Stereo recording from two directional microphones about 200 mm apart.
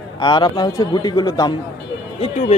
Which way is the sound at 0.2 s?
20° left (ahead or behind).